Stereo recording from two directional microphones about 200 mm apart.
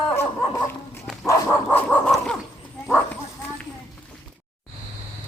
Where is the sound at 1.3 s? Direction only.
5° left (ahead or behind).